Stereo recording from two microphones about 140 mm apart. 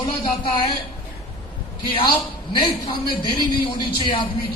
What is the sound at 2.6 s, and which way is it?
A man's voice, 35° left (ahead or behind).